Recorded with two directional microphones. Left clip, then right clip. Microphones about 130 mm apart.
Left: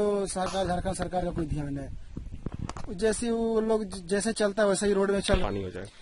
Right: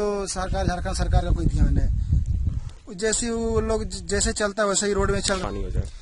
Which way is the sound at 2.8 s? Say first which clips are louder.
Right 2 dB; 5° right (ahead or behind).